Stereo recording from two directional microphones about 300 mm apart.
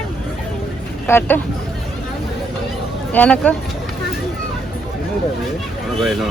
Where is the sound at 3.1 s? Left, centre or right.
Centre.